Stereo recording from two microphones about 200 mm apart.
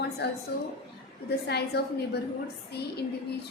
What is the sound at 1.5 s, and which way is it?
A woman's voice, 55° left (ahead or behind).